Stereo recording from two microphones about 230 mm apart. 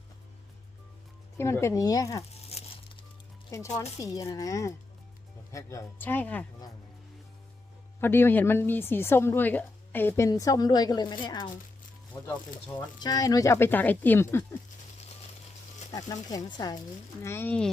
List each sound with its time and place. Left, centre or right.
1.4 s a woman's voice: centre
2.3 s crumpling: left
3.5 s a woman's voice: centre
8.0 s a woman's voice: centre
15.9 s a woman's voice: centre